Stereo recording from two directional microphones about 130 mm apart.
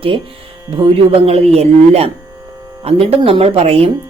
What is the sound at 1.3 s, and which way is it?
A woman's voice, 50° right (ahead or behind).